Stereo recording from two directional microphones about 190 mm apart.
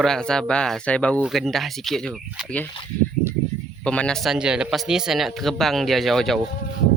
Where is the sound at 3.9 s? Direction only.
5° left (ahead or behind).